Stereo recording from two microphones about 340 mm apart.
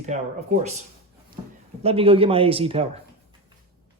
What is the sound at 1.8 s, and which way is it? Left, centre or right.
Speech, centre.